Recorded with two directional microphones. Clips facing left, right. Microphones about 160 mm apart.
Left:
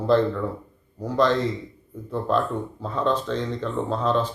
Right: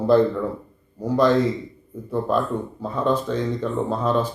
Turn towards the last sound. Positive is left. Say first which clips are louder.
# right 1 dB
turn(degrees=-10)  # may be behind; listen again after turning